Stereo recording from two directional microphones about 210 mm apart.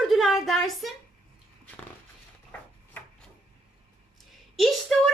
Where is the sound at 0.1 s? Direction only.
Centre (ahead or behind).